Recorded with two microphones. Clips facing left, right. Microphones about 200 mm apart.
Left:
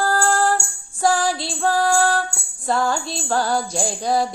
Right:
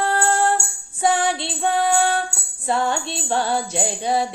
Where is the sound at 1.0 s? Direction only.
20° right (ahead or behind).